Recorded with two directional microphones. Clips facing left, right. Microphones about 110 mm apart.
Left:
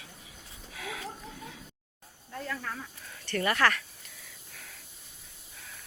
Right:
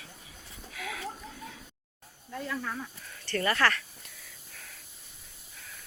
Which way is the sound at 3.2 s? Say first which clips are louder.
Even; 15° left (ahead or behind).